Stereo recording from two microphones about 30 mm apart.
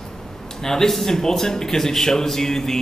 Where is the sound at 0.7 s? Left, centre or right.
Centre.